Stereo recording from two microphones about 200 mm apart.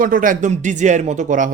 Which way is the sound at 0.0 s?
45° right (ahead or behind).